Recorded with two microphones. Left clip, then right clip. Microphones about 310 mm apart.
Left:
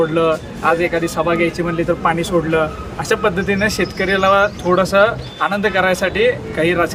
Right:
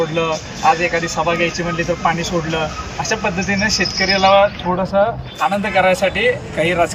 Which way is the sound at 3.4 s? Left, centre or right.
Centre.